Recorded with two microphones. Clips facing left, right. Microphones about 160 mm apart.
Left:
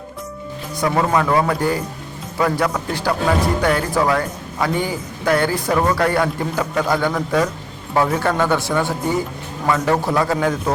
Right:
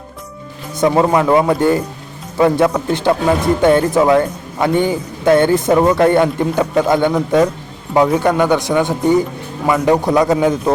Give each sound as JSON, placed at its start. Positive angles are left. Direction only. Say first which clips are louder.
{"t": 0.8, "sound": "speech", "louder": "right 5 dB", "side_deg": -25}